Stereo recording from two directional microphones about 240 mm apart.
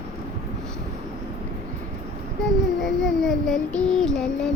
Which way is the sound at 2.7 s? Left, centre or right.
Centre.